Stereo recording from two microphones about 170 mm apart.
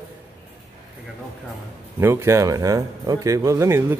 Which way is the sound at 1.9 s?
15° right (ahead or behind).